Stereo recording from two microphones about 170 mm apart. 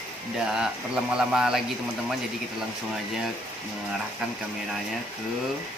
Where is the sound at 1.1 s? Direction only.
5° right (ahead or behind).